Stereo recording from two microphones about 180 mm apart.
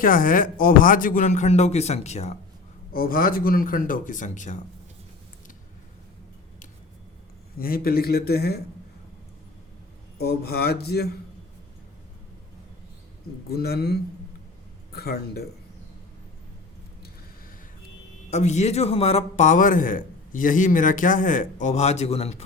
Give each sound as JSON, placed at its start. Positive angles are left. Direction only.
{"t": 0.0, "sound": "speech", "side_deg": 50}
{"t": 2.9, "sound": "speech", "side_deg": 55}
{"t": 7.6, "sound": "speech", "side_deg": 55}
{"t": 10.2, "sound": "speech", "side_deg": 60}
{"t": 13.5, "sound": "speech", "side_deg": 60}
{"t": 18.3, "sound": "a man's voice", "side_deg": 40}